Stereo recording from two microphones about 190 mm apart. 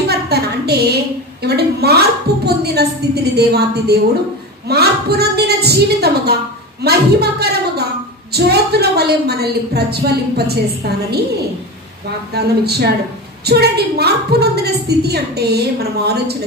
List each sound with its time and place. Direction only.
0.1 s a sound: 55° right (ahead or behind)
1.4 s a woman's voice: 60° right (ahead or behind)
12.4 s a woman's voice: 60° right (ahead or behind)